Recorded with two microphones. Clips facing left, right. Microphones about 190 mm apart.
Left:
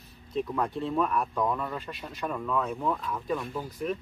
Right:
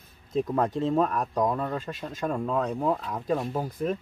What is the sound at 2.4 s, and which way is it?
Speech, 30° right (ahead or behind).